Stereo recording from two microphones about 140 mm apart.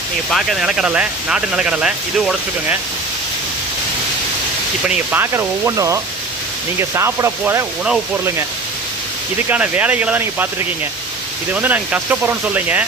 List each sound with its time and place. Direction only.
0.3 s speech: centre (ahead or behind)
4.9 s speech: 15° right (ahead or behind)
9.5 s speech: 10° right (ahead or behind)
11.5 s speech: 10° right (ahead or behind)